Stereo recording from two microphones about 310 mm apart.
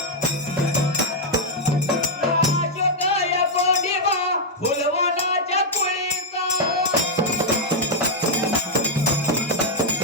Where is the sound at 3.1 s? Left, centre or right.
Centre.